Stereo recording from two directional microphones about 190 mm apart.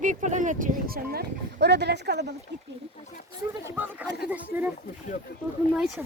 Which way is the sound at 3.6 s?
10° right (ahead or behind).